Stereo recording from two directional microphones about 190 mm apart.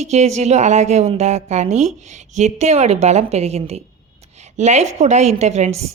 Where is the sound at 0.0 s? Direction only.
35° right (ahead or behind).